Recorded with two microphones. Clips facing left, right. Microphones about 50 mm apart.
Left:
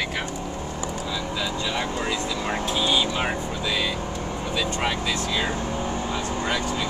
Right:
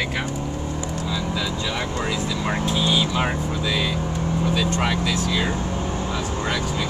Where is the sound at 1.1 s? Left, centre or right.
Centre.